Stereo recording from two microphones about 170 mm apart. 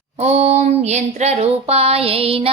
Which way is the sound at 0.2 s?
40° right (ahead or behind).